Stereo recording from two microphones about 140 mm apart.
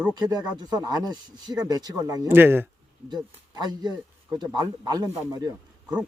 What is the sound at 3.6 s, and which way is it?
Speech, 30° right (ahead or behind).